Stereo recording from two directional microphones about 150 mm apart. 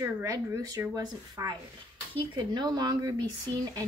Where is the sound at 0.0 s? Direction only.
20° right (ahead or behind).